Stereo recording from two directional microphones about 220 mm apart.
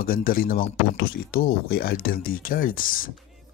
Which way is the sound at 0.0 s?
40° left (ahead or behind).